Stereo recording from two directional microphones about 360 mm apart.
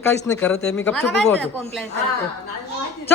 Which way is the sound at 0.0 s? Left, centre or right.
Centre.